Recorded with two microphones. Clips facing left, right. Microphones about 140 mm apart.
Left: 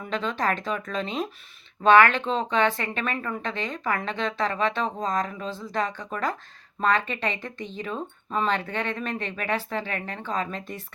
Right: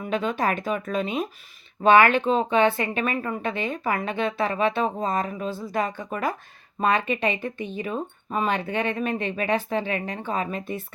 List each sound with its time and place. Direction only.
0.0 s speech: 10° right (ahead or behind)